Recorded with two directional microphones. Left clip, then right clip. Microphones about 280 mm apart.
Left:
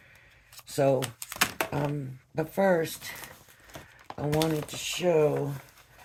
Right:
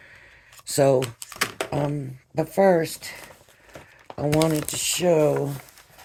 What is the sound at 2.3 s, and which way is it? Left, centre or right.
Speech, right.